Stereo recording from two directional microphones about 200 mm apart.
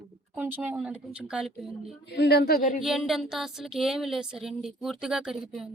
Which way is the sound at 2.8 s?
Centre (ahead or behind).